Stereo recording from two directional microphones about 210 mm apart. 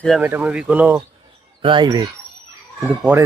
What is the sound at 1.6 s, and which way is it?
Speech, 20° right (ahead or behind).